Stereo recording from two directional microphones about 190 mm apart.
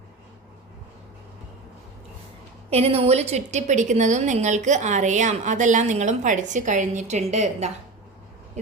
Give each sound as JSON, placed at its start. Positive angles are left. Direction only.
{"t": 2.6, "sound": "a woman's voice", "side_deg": -30}